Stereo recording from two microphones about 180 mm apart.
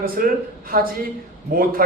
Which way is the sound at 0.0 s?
55° right (ahead or behind).